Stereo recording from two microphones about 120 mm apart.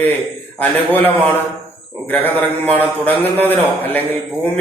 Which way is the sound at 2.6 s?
15° left (ahead or behind).